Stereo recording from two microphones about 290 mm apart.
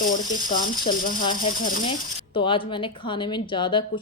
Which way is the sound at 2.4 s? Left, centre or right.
Centre.